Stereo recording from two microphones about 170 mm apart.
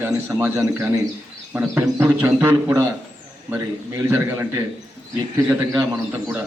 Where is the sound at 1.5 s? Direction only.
5° right (ahead or behind).